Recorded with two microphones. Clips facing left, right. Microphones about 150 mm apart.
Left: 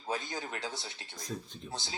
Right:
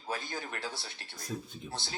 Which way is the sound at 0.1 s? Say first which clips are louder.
Left 1 dB; 20° left (ahead or behind).